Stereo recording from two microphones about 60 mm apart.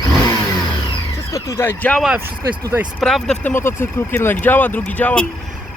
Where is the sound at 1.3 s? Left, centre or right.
Left.